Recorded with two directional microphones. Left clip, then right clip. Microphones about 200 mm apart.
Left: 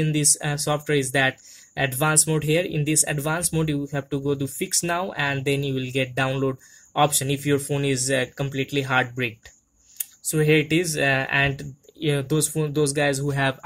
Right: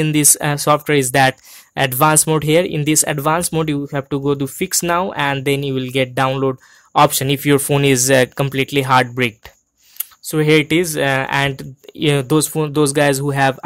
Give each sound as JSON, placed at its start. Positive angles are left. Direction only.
{"t": 0.0, "sound": "speech", "side_deg": -50}